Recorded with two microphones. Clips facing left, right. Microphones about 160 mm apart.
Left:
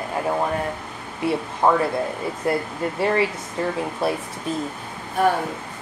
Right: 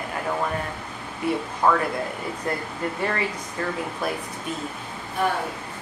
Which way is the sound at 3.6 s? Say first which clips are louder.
Left 4 dB; 25° left (ahead or behind).